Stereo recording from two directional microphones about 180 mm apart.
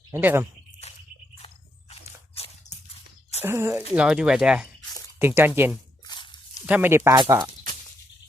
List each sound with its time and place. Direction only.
0.1 s speech: 10° right (ahead or behind)
1.9 s crunch: 35° left (ahead or behind)
3.4 s speech: 15° right (ahead or behind)
6.1 s dog: 25° left (ahead or behind)
6.7 s speech: 10° right (ahead or behind)